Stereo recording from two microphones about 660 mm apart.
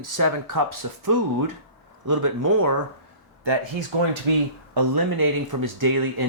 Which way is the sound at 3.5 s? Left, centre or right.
Right.